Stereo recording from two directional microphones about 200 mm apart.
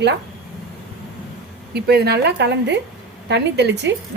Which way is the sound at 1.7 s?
50° right (ahead or behind).